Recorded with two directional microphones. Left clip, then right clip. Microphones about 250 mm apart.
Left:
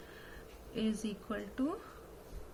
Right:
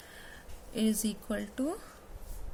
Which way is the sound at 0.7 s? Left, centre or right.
Right.